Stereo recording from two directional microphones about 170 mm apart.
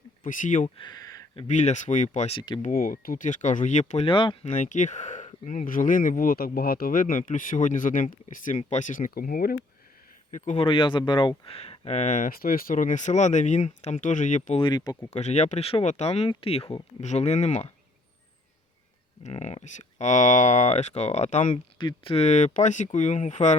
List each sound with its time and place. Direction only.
0.2 s speech: 50° left (ahead or behind)
0.8 s a sound: 25° left (ahead or behind)
1.5 s speech: 45° left (ahead or behind)
2.6 s speech: 55° left (ahead or behind); by 4.4 s 30° left (ahead or behind)
4.4 s speech: 45° left (ahead or behind)
10.3 s speech: 45° left (ahead or behind)
14.6 s speech: 25° left (ahead or behind)
15.1 s speech: 40° left (ahead or behind)
19.2 s speech: 40° left (ahead or behind)
21.5 s speech: 30° left (ahead or behind)